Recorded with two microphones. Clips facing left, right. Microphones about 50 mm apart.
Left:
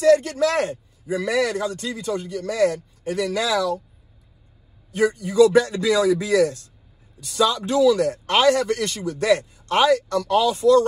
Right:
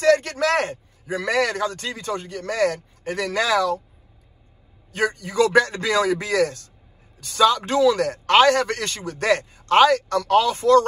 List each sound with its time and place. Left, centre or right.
0.0 s a man's voice: right
4.9 s a man's voice: right